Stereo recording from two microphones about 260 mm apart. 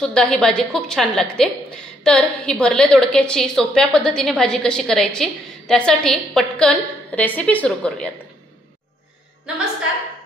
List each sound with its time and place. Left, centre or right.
0.0 s a woman's voice: centre